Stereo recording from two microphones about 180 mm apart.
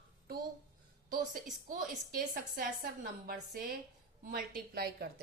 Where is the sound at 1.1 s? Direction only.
50° right (ahead or behind).